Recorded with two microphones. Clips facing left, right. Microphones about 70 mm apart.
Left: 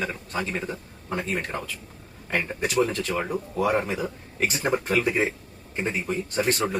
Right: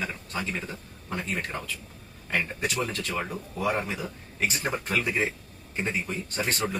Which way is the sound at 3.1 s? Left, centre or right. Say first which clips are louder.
Left 4 dB; centre.